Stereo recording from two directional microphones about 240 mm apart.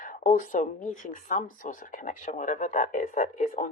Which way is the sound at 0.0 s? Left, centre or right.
Left.